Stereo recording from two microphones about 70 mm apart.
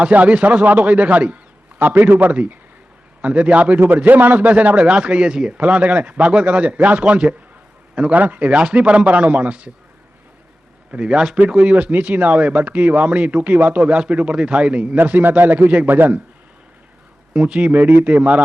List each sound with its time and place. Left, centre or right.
0.0 s a man's voice: centre
10.9 s a man's voice: centre
17.3 s a man's voice: centre